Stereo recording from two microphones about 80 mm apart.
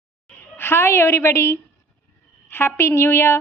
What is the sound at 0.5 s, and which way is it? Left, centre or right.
A woman's voice, left.